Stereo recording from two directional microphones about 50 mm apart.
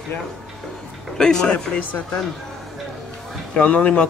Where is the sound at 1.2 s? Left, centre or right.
Centre.